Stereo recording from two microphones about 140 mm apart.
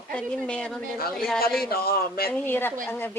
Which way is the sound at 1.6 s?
90° left.